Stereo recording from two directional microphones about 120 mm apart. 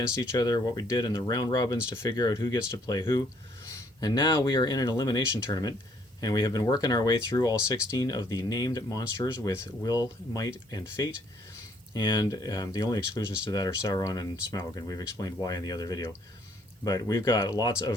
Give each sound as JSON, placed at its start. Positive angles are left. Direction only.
{"t": 0.2, "sound": "speech", "side_deg": 35}